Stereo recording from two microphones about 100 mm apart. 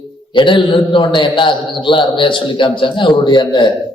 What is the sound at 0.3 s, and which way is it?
A man's voice, 55° left (ahead or behind).